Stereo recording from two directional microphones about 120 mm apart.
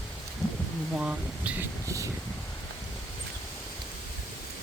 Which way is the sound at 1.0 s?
10° right (ahead or behind).